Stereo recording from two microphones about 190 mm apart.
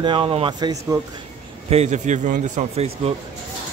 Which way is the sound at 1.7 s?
35° right (ahead or behind).